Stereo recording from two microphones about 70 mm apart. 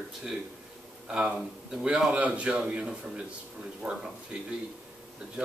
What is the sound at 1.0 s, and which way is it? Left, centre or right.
Speech, centre.